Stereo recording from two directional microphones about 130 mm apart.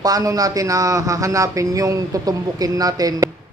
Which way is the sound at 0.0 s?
30° right (ahead or behind).